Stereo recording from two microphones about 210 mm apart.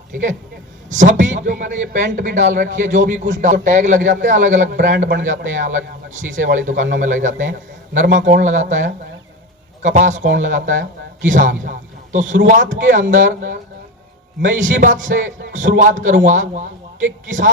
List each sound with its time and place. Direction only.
0.9 s a man's voice: 35° right (ahead or behind)
4.9 s a man's voice: 45° right (ahead or behind)
14.5 s a man's voice: 40° right (ahead or behind)